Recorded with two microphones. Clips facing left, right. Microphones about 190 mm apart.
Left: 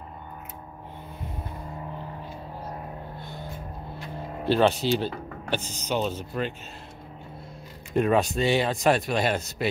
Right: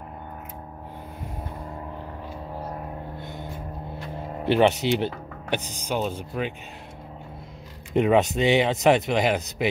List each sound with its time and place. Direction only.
4.5 s speech: 20° right (ahead or behind)
7.9 s speech: 20° right (ahead or behind)